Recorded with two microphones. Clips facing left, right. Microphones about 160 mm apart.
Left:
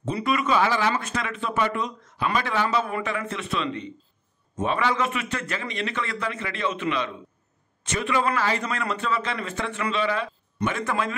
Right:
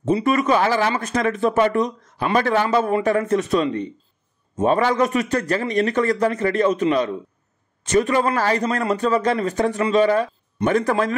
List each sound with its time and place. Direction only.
0.2 s a man's voice: 40° right (ahead or behind)